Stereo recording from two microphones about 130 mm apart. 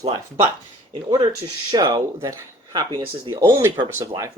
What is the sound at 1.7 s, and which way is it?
Speech, 30° right (ahead or behind).